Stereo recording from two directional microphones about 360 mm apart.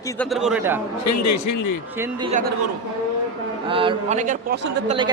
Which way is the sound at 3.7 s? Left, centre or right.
Centre.